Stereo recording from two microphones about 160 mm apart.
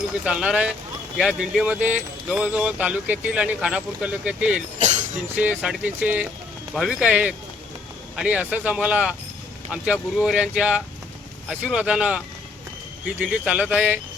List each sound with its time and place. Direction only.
0.3 s speech: 5° right (ahead or behind)
4.8 s music: 50° right (ahead or behind)
5.4 s speech: 5° right (ahead or behind)